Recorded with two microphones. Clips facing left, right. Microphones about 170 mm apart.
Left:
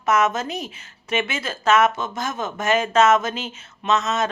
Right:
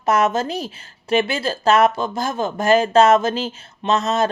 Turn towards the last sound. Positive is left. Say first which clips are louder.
# right 3 dB
turn(degrees=-35)  # may be behind; listen again after turning